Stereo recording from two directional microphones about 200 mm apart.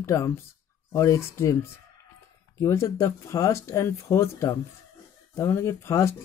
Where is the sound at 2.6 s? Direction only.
15° left (ahead or behind).